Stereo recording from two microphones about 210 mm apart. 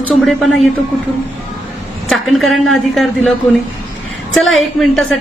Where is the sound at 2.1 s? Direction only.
Centre (ahead or behind).